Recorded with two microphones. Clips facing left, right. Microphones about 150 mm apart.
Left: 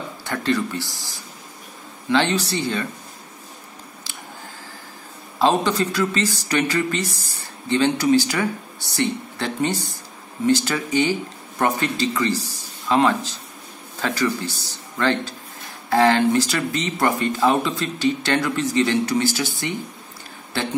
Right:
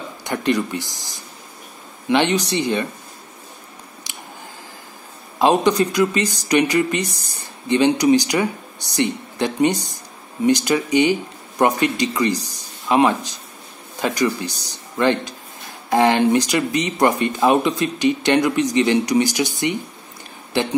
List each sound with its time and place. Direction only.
0.2 s speech: 15° right (ahead or behind)
5.4 s speech: 15° right (ahead or behind)